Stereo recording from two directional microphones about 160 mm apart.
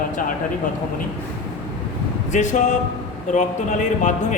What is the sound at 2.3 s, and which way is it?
A man's voice, 50° left (ahead or behind).